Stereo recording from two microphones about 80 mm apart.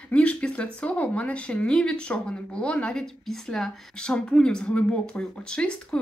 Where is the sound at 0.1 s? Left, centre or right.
Centre.